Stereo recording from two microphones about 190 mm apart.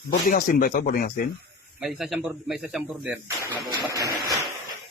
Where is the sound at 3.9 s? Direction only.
15° right (ahead or behind).